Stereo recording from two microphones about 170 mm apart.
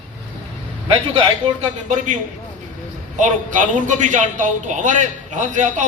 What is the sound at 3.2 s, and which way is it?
A man's voice, 50° right (ahead or behind).